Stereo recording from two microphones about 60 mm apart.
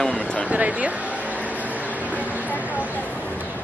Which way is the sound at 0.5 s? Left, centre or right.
Right.